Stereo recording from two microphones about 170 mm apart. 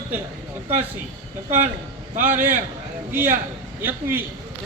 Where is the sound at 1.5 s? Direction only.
45° right (ahead or behind).